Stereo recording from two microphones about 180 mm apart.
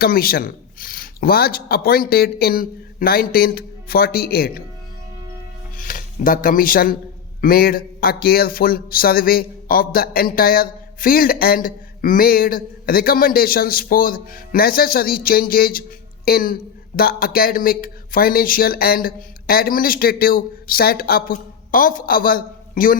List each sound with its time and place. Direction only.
0.0 s speech: 55° left (ahead or behind)
5.7 s speech: 45° left (ahead or behind)